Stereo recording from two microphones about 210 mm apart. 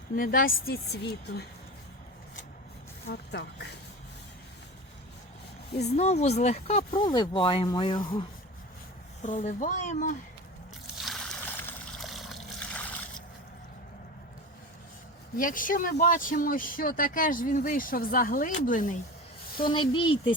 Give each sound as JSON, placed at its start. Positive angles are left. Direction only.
{"t": 0.2, "sound": "a woman's voice", "side_deg": 45}
{"t": 3.1, "sound": "a woman's voice", "side_deg": 55}
{"t": 5.8, "sound": "speech", "side_deg": 30}
{"t": 9.2, "sound": "speech", "side_deg": 35}
{"t": 10.9, "sound": "water", "side_deg": 0}
{"t": 15.4, "sound": "speech", "side_deg": 40}
{"t": 19.6, "sound": "speech", "side_deg": 20}